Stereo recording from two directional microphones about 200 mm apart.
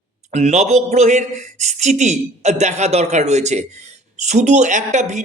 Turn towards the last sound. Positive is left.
turn(degrees=-35)  # may be behind; listen again after turning